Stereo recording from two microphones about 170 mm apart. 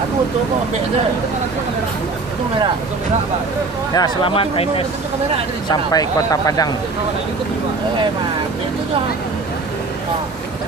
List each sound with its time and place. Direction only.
3.9 s speech: 25° left (ahead or behind)
5.6 s speech: 20° left (ahead or behind)